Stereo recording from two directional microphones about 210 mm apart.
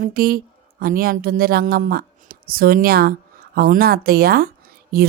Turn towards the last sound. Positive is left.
turn(degrees=-45)  # may be behind; listen again after turning